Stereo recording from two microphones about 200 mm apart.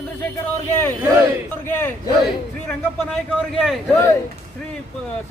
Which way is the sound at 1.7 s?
10° left (ahead or behind).